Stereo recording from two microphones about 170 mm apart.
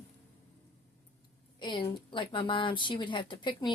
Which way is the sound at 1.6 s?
30° left (ahead or behind).